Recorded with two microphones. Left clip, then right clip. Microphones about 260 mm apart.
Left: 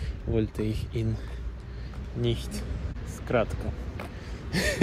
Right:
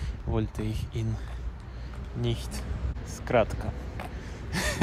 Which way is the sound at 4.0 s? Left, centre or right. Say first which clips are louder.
Even; centre.